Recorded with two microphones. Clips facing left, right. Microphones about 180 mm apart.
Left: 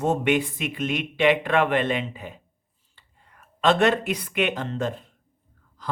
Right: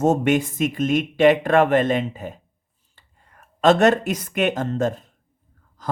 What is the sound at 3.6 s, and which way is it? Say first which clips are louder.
Speech: right 4 dB; 45° right (ahead or behind).